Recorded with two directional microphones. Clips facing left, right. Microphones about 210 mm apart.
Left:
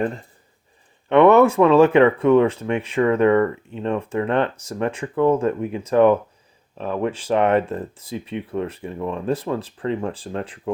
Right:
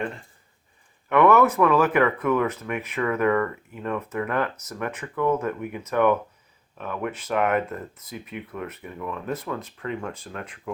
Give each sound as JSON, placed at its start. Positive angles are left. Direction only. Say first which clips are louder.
{"t": 1.1, "sound": "speech", "louder": "left 5 dB", "side_deg": 25}